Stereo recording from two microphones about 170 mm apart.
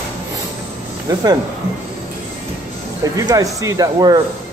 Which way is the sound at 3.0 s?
20° right (ahead or behind).